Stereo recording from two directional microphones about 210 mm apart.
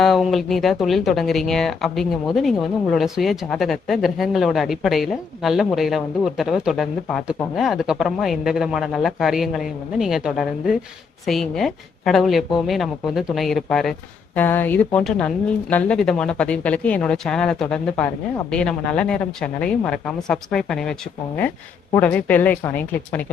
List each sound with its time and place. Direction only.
0.0 s speech: centre (ahead or behind)
21.9 s speech: 5° left (ahead or behind)